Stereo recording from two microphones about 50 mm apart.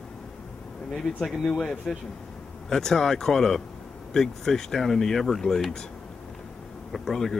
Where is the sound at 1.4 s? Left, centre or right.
Centre.